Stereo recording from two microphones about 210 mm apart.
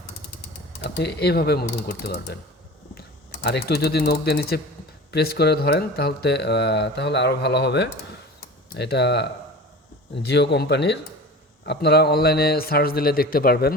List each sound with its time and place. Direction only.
0.8 s speech: 50° left (ahead or behind)
3.4 s speech: 50° left (ahead or behind)